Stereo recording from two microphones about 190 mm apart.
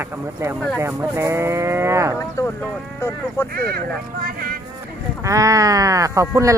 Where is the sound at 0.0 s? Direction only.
15° right (ahead or behind).